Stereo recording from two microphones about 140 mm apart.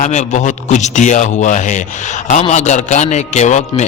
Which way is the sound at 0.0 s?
60° left (ahead or behind).